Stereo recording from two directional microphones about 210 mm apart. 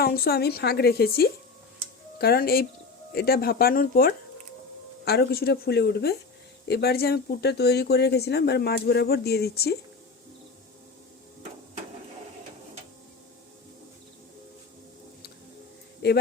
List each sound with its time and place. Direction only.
0.0 s speech: 45° left (ahead or behind)
16.0 s speech: 50° left (ahead or behind)